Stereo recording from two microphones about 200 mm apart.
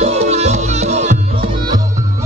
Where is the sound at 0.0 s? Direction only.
35° right (ahead or behind).